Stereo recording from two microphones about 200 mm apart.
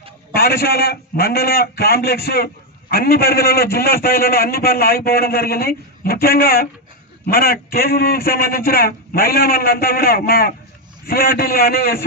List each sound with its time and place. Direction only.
0.3 s a man's voice: 50° left (ahead or behind)